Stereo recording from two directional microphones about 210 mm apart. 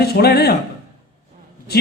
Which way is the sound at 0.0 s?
50° left (ahead or behind).